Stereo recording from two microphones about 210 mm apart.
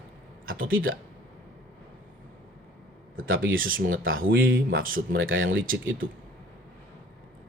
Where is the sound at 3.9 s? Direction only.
70° right (ahead or behind).